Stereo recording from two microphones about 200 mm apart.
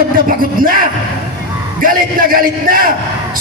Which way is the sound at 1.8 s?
45° right (ahead or behind).